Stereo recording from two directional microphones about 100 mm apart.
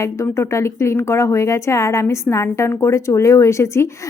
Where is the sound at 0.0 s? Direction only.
30° left (ahead or behind).